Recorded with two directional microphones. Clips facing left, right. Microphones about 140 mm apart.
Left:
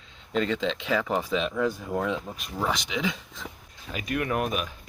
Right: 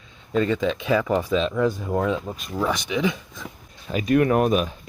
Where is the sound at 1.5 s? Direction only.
35° right (ahead or behind).